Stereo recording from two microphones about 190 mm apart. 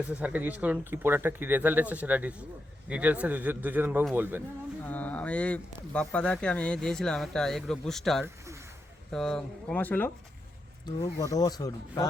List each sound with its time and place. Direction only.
0.1 s speech: 10° right (ahead or behind)
4.9 s speech: 10° left (ahead or behind)
11.2 s speech: 20° left (ahead or behind)